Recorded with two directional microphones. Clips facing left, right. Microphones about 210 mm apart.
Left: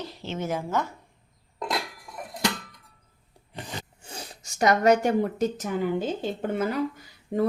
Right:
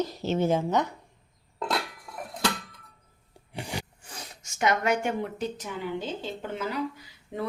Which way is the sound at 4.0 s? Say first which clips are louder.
Left 3 dB; 25° left (ahead or behind).